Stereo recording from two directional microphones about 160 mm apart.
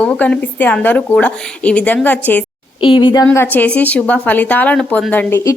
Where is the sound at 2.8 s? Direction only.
30° left (ahead or behind).